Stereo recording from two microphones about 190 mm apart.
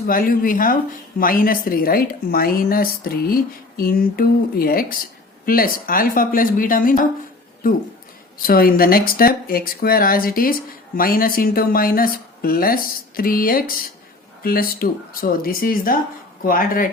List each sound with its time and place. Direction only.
0.1 s speech: 45° left (ahead or behind)
8.4 s speech: 50° left (ahead or behind)